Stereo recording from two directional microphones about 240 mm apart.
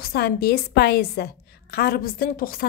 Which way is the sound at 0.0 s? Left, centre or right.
Left.